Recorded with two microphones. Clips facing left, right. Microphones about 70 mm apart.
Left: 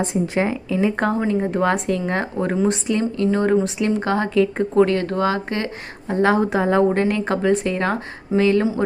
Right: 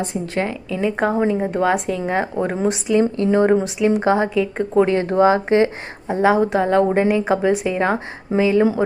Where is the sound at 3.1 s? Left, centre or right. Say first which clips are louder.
Right 2 dB; centre.